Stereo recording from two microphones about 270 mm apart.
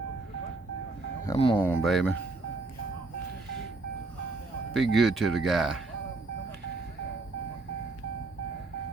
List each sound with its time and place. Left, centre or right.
1.3 s speech: centre
1.6 s speech: centre
4.7 s speech: centre